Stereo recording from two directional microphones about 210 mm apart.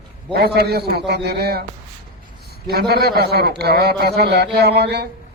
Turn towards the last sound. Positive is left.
turn(degrees=-50)  # may be behind; listen again after turning